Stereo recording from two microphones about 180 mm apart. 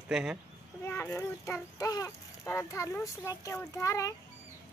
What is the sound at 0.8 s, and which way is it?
Speech, 15° left (ahead or behind).